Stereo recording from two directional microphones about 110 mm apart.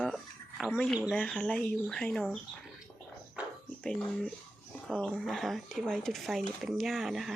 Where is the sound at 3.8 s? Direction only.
5° left (ahead or behind).